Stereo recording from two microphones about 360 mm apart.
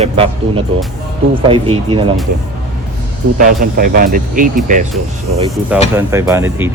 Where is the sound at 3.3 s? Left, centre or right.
Right.